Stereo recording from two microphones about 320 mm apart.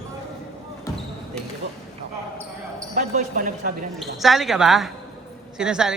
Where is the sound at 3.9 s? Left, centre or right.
Centre.